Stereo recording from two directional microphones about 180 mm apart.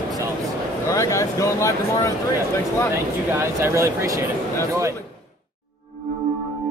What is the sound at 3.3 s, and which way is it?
Speech, 15° right (ahead or behind).